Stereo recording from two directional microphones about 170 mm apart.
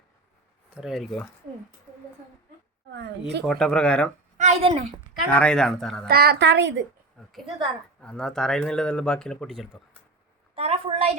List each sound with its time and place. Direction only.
0.7 s speech: 5° right (ahead or behind)
2.9 s speech: 85° right
3.4 s speech: centre (ahead or behind)
4.4 s a woman's voice: 40° right (ahead or behind)
5.3 s speech: 5° left (ahead or behind)
6.1 s a woman's voice: 65° right (ahead or behind); by 6.8 s 90° right
8.0 s speech: 5° left (ahead or behind)
10.5 s a sound: 35° right (ahead or behind)